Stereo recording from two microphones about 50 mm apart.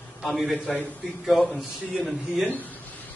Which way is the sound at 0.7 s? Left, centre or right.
Centre.